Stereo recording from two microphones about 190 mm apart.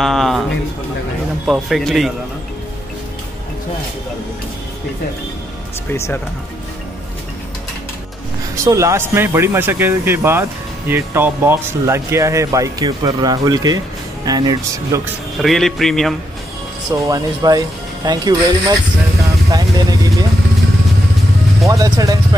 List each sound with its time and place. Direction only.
0.0 s a sound: centre (ahead or behind)
1.4 s a man's voice: centre (ahead or behind)
5.9 s speech: 15° left (ahead or behind)
8.6 s speech: 15° right (ahead or behind)
15.4 s a man's voice: centre (ahead or behind)
17.1 s speech: 20° right (ahead or behind)
19.5 s vehicle: 20° right (ahead or behind)
21.6 s speech: 20° right (ahead or behind)